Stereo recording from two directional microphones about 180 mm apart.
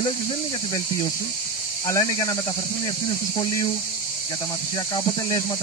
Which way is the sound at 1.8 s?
20° left (ahead or behind).